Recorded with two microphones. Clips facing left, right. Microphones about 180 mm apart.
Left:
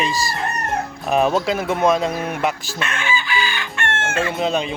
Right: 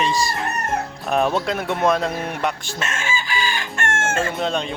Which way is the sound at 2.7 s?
40° right (ahead or behind).